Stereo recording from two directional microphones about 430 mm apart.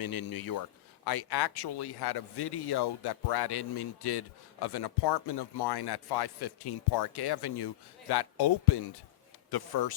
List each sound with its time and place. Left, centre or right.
0.0 s speech: left